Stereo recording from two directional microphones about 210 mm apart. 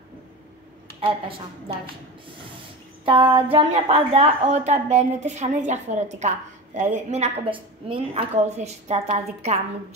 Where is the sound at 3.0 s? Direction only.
25° right (ahead or behind).